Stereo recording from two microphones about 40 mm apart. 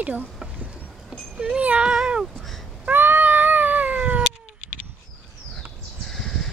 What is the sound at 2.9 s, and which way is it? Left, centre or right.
Cat, right.